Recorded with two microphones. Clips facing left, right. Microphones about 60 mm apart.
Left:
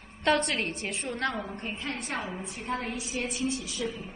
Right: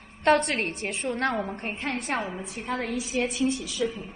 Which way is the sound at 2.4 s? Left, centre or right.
Right.